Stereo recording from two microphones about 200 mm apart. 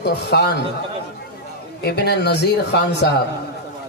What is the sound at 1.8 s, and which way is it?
Speech, 55° left (ahead or behind).